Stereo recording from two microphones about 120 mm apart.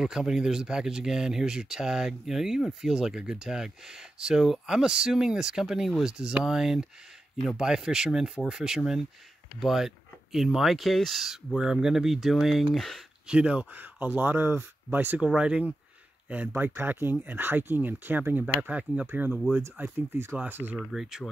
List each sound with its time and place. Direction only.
0.0 s speech: 5° right (ahead or behind)
13.3 s speech: 10° right (ahead or behind)
20.7 s speech: 5° right (ahead or behind)